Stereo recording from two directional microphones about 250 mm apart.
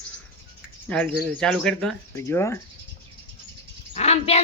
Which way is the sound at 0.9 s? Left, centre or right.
Centre.